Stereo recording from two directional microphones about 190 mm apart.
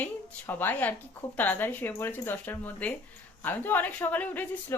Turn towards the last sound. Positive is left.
turn(degrees=10)  # may be behind; listen again after turning